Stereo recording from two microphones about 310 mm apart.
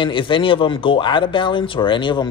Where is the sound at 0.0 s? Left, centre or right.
Centre.